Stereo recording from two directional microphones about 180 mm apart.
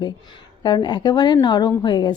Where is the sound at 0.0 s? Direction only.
25° left (ahead or behind).